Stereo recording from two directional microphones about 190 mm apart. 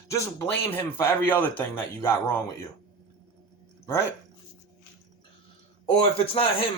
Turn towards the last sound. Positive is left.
turn(degrees=30)  # may be behind; listen again after turning